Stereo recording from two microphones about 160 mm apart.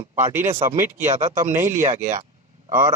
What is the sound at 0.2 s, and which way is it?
Speech, 15° right (ahead or behind).